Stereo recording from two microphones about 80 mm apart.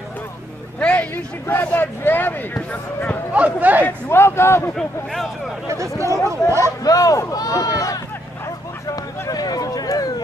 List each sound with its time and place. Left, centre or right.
0.7 s speech: left
3.3 s speech: centre
3.8 s speech: left
4.7 s speech: centre
5.7 s speech: right
6.6 s speech: left
9.3 s speech: left